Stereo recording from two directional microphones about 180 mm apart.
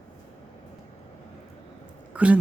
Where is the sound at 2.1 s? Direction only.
5° right (ahead or behind).